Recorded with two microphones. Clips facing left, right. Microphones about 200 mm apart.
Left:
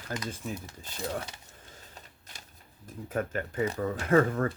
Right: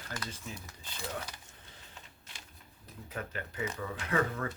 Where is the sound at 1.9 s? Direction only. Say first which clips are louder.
Left 3 dB; 40° left (ahead or behind).